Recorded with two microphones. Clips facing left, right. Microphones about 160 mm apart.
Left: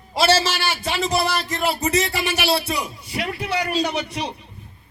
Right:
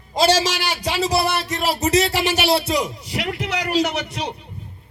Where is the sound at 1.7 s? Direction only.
75° right (ahead or behind).